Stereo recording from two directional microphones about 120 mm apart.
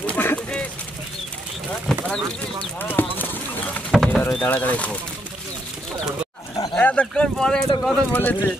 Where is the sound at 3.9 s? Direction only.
Centre (ahead or behind).